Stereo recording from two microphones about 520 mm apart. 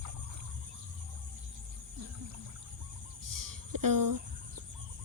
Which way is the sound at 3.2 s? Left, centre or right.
Right.